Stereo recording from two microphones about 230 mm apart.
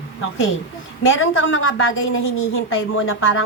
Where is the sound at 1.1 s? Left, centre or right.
Left.